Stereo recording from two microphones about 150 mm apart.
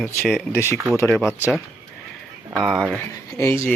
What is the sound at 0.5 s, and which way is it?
Speech, 20° left (ahead or behind).